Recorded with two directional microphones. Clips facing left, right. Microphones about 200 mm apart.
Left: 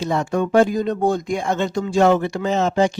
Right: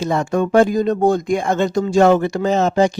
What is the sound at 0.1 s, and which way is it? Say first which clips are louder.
Speech: right 2 dB; 50° right (ahead or behind).